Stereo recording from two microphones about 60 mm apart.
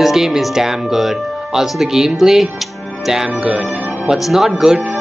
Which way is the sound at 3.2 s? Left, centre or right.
Right.